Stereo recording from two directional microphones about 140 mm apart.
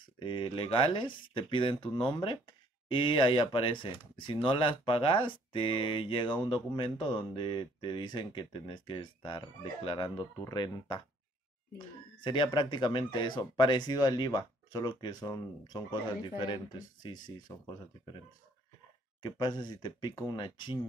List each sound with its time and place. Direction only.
0.0 s speech: 35° left (ahead or behind)
12.2 s speech: 35° left (ahead or behind)
19.2 s speech: 30° left (ahead or behind)